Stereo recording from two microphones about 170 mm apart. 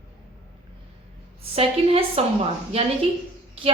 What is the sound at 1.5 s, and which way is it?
Speech, 35° right (ahead or behind).